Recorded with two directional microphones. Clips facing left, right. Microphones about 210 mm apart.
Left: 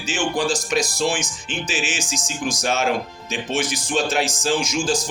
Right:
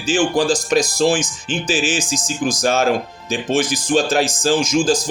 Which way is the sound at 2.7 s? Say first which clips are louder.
Right 5 dB; 45° right (ahead or behind).